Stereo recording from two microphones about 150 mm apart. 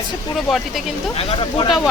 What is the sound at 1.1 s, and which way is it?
Speech, 40° left (ahead or behind).